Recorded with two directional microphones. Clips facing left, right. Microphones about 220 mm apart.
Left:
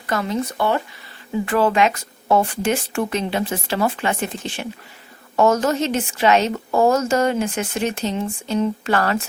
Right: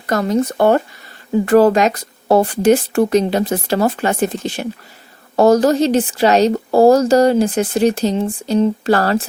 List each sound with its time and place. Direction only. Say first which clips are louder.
0.1 s speech: right 6 dB; 40° right (ahead or behind)